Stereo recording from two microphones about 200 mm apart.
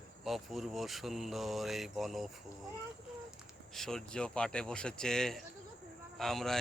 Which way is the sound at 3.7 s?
Centre (ahead or behind).